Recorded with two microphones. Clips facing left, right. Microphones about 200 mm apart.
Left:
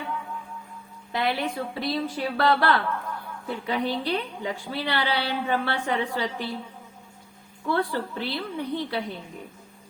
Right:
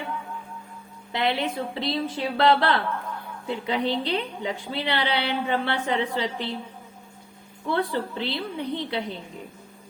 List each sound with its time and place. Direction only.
1.1 s a woman's voice: 20° right (ahead or behind)
7.7 s a woman's voice: 20° right (ahead or behind)